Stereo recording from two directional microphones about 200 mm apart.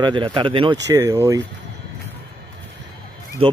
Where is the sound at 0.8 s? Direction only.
15° right (ahead or behind).